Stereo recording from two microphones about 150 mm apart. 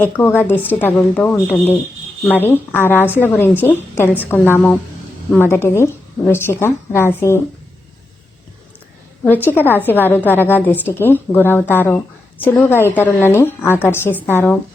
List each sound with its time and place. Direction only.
0.0 s a woman's voice: 15° left (ahead or behind)
9.5 s a woman's voice: 15° left (ahead or behind)